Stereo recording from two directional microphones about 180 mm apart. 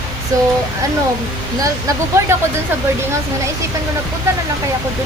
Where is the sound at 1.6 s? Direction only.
20° right (ahead or behind).